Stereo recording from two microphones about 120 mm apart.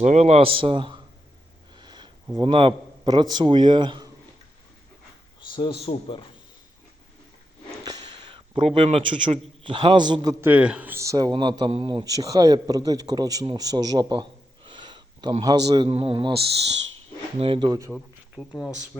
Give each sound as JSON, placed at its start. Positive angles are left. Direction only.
{"t": 0.0, "sound": "a man's voice", "side_deg": -70}
{"t": 1.7, "sound": "sniff", "side_deg": -40}
{"t": 2.3, "sound": "a man's voice", "side_deg": -40}
{"t": 5.5, "sound": "speech", "side_deg": 40}
{"t": 7.9, "sound": "a sound", "side_deg": -35}
{"t": 9.6, "sound": "a man's voice", "side_deg": -45}
{"t": 10.4, "sound": "a man's voice", "side_deg": -10}
{"t": 12.0, "sound": "a man's voice", "side_deg": -30}
{"t": 14.7, "sound": "a sound", "side_deg": -40}
{"t": 15.9, "sound": "a man's voice", "side_deg": -50}
{"t": 17.4, "sound": "a man's voice", "side_deg": -50}
{"t": 17.7, "sound": "speech", "side_deg": -30}
{"t": 17.9, "sound": "speech", "side_deg": 0}